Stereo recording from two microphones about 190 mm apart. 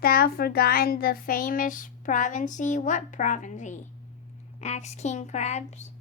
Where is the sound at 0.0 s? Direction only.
50° left (ahead or behind).